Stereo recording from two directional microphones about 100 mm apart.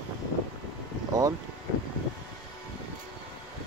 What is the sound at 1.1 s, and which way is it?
Speech, 35° right (ahead or behind).